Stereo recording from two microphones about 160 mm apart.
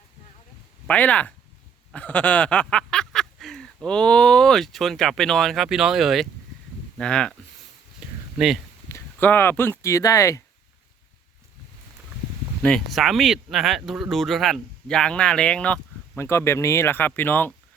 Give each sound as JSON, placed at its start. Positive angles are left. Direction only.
{"t": 0.9, "sound": "speech", "side_deg": 10}
{"t": 1.9, "sound": "a sound", "side_deg": 10}
{"t": 6.9, "sound": "speech", "side_deg": 5}
{"t": 8.0, "sound": "a sound", "side_deg": -5}
{"t": 8.9, "sound": "speech", "side_deg": 15}
{"t": 12.6, "sound": "speech", "side_deg": 0}